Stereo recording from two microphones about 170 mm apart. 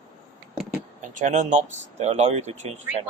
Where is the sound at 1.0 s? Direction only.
45° right (ahead or behind).